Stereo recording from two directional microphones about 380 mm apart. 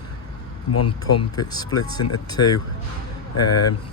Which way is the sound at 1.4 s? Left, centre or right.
Centre.